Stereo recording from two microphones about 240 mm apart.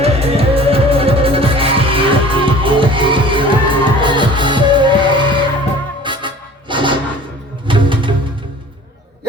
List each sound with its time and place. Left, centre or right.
0.0 s music: right